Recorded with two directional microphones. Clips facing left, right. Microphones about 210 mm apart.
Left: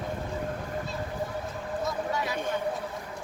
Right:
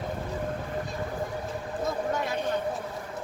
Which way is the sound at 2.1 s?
50° right (ahead or behind).